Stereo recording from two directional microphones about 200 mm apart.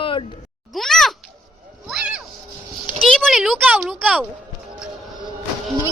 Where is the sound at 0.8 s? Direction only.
Centre (ahead or behind).